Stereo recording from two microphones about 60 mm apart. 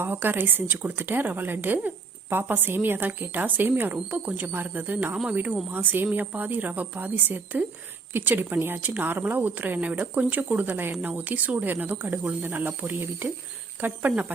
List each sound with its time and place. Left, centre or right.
0.0 s speech: right